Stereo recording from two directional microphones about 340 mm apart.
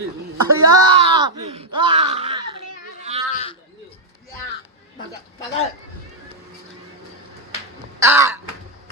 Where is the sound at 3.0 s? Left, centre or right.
Centre.